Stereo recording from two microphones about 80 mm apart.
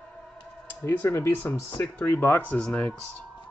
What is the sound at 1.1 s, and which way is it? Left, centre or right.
Speech, left.